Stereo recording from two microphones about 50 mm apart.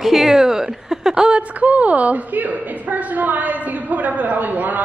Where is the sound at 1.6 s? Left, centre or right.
Right.